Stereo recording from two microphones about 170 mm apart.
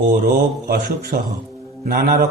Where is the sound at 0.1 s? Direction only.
65° right (ahead or behind).